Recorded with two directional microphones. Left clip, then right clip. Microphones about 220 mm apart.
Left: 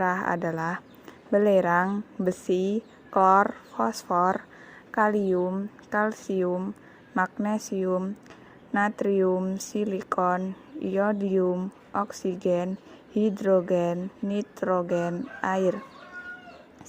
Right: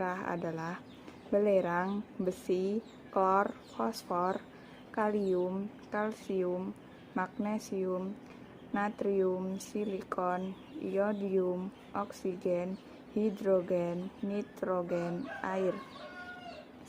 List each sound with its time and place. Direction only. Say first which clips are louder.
0.0 s speech: left 10 dB; 30° left (ahead or behind)